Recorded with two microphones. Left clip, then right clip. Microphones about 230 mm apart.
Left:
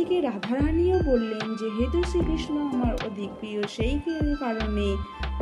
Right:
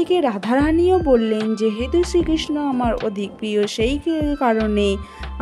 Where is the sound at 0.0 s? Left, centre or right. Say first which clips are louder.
Right 7 dB; right.